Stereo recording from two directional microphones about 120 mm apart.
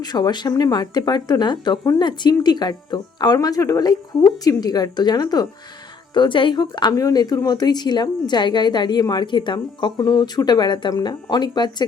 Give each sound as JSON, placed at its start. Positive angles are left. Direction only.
{"t": 0.0, "sound": "a woman's voice", "side_deg": 35}